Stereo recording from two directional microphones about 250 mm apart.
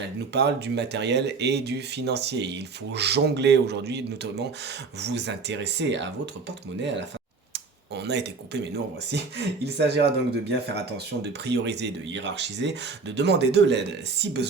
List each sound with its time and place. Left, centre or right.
0.3 s speech: right
7.5 s speech: right